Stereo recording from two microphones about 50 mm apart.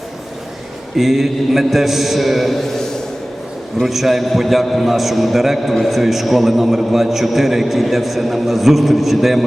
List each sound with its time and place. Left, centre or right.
0.9 s a man's voice: centre